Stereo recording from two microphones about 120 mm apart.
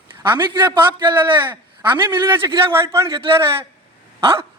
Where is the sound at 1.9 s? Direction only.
15° right (ahead or behind).